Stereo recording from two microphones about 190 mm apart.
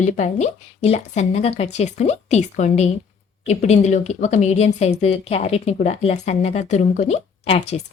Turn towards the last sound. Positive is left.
turn(degrees=35)  # may be behind; listen again after turning